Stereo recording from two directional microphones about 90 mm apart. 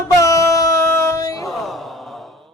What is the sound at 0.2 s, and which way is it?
Music, 40° left (ahead or behind).